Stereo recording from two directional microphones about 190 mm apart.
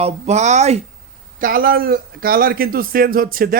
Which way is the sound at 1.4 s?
50° right (ahead or behind).